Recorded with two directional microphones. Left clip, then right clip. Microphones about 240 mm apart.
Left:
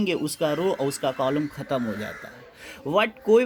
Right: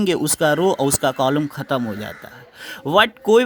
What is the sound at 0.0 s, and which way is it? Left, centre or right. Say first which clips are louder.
Speech: right 7 dB; right.